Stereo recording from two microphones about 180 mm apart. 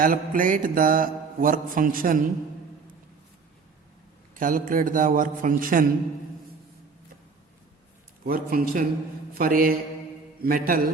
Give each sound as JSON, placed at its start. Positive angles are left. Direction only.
{"t": 0.0, "sound": "mantra", "side_deg": -50}
{"t": 4.4, "sound": "mantra", "side_deg": -50}
{"t": 8.2, "sound": "mantra", "side_deg": -55}
{"t": 10.4, "sound": "a man's voice", "side_deg": -55}